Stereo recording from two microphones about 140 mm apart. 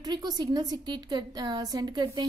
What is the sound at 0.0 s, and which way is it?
A woman's voice, 30° right (ahead or behind).